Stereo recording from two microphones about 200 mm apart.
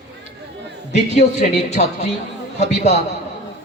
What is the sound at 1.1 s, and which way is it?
A man's voice, 35° left (ahead or behind).